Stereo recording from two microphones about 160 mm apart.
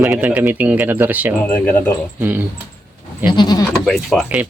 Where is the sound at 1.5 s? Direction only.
10° left (ahead or behind).